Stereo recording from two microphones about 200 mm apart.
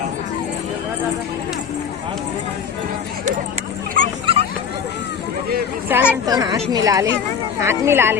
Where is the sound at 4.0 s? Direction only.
45° right (ahead or behind).